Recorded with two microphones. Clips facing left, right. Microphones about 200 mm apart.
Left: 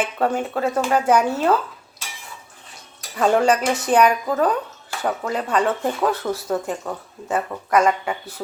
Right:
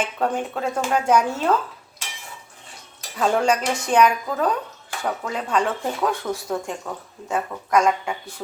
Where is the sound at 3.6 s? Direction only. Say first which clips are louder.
Left 1 dB; 5° left (ahead or behind).